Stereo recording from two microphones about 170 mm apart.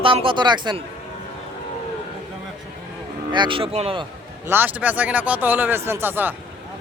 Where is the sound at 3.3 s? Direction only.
30° right (ahead or behind).